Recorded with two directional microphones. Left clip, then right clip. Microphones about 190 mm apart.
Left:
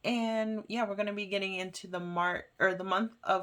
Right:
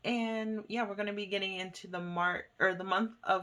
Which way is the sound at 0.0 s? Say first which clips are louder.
Left 3 dB; 25° left (ahead or behind).